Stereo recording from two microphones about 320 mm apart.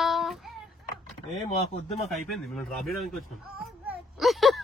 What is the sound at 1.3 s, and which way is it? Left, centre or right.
Speech, centre.